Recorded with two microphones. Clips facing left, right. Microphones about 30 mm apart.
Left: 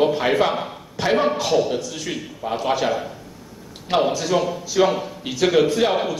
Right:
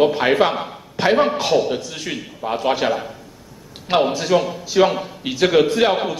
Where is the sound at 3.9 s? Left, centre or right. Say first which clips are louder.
Right 2 dB; right.